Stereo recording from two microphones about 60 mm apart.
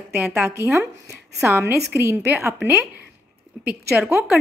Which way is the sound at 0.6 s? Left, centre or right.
Right.